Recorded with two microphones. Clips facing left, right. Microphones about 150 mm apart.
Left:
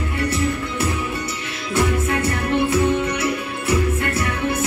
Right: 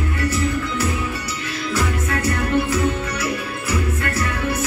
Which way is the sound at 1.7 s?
25° left (ahead or behind).